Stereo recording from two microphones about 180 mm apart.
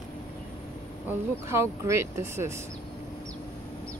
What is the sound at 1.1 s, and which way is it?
Speech, 15° right (ahead or behind).